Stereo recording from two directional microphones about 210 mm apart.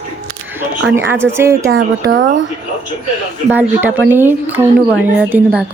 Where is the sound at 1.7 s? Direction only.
65° right (ahead or behind).